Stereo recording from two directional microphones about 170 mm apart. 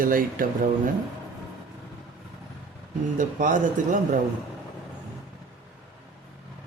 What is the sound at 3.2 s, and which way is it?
A man's voice, 50° right (ahead or behind).